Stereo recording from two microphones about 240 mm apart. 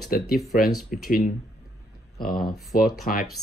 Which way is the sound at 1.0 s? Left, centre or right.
Left.